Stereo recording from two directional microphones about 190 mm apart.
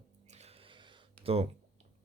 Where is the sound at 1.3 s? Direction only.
30° right (ahead or behind).